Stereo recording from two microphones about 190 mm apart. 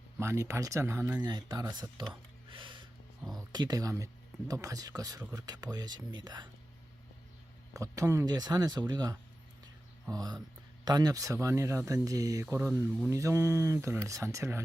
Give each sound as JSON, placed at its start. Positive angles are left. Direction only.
{"t": 0.2, "sound": "speech", "side_deg": -15}
{"t": 1.2, "sound": "speech", "side_deg": -20}
{"t": 2.5, "sound": "a sound", "side_deg": -25}
{"t": 3.5, "sound": "speech", "side_deg": -20}
{"t": 7.8, "sound": "speech", "side_deg": -15}